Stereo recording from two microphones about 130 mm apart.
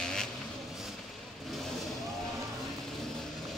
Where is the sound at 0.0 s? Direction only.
5° left (ahead or behind).